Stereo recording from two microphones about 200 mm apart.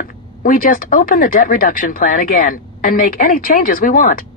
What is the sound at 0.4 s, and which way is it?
Speech, 45° left (ahead or behind).